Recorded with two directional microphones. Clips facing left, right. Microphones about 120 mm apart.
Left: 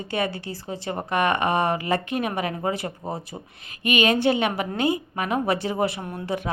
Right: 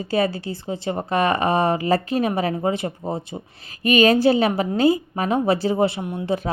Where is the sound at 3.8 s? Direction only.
35° right (ahead or behind).